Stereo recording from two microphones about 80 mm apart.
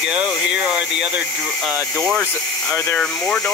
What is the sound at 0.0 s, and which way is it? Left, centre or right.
Speech, centre.